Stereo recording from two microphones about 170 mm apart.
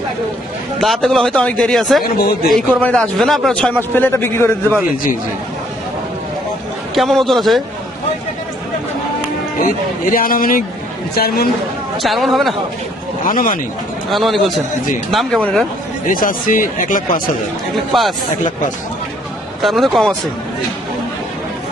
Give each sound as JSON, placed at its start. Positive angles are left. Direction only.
{"t": 0.8, "sound": "a man's voice", "side_deg": 0}
{"t": 6.9, "sound": "a man's voice", "side_deg": 0}
{"t": 9.6, "sound": "a man's voice", "side_deg": 55}
{"t": 12.0, "sound": "a man's voice", "side_deg": 0}
{"t": 13.2, "sound": "a man's voice", "side_deg": 55}
{"t": 14.1, "sound": "a man's voice", "side_deg": 0}
{"t": 16.0, "sound": "speech", "side_deg": 55}
{"t": 17.9, "sound": "a man's voice", "side_deg": 0}
{"t": 19.6, "sound": "a man's voice", "side_deg": 0}